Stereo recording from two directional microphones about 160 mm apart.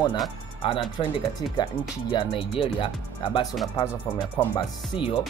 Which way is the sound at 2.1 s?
35° left (ahead or behind).